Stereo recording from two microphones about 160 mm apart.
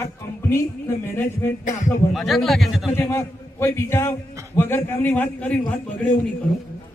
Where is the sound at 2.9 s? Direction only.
15° left (ahead or behind).